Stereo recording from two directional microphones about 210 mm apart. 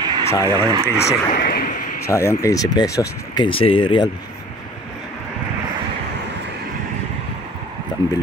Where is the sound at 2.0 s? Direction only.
15° left (ahead or behind).